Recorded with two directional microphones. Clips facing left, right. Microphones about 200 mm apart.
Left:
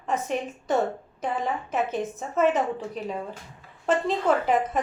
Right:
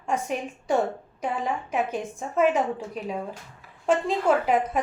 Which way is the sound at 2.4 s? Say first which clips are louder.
Even; 5° right (ahead or behind).